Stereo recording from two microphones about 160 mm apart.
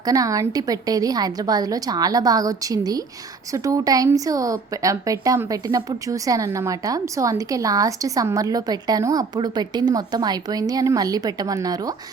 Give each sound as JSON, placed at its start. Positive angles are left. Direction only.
{"t": 0.0, "sound": "speech", "side_deg": -20}